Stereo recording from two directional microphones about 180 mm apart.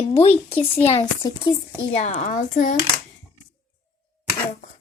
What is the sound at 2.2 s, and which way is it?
Speech, 45° left (ahead or behind).